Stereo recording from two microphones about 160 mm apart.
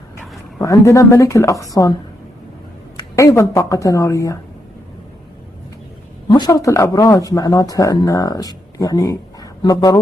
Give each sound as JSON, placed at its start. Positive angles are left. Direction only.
{"t": 0.6, "sound": "speech", "side_deg": 20}
{"t": 3.0, "sound": "speech", "side_deg": 20}
{"t": 6.2, "sound": "speech", "side_deg": 25}